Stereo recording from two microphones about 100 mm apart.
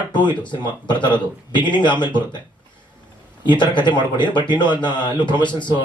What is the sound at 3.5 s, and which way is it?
A man's voice, 50° left (ahead or behind).